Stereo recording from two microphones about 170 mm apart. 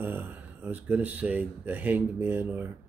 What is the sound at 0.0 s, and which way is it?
Speech, 10° right (ahead or behind).